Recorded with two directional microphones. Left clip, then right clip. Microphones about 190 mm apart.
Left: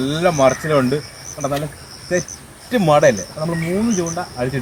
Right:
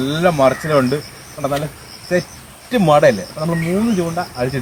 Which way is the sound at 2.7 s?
Centre (ahead or behind).